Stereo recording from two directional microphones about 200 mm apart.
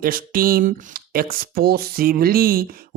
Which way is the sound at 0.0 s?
45° right (ahead or behind).